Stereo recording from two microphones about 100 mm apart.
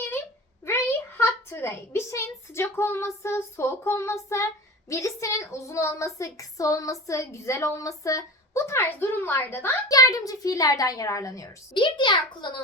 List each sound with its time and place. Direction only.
0.6 s a child's voice: 25° left (ahead or behind)
9.9 s a child's voice: 35° left (ahead or behind)
11.7 s a child's voice: 50° left (ahead or behind)